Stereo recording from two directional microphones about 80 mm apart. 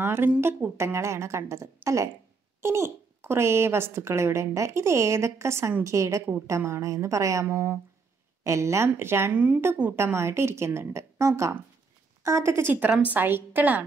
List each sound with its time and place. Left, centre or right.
0.0 s a woman's voice: right
7.4 s a woman's voice: right
8.5 s a woman's voice: right
9.3 s a woman's voice: centre
9.9 s a woman's voice: right